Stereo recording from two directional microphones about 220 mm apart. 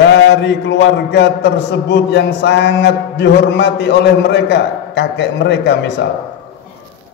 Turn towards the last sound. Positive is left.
turn(degrees=50)  # may be behind; listen again after turning